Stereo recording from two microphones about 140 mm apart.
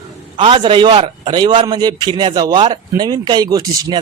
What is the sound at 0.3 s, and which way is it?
A man's voice, 35° right (ahead or behind).